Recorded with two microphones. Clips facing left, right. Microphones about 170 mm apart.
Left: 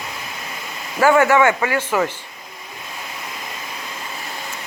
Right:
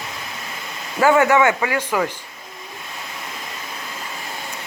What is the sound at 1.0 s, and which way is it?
Speech, 20° right (ahead or behind).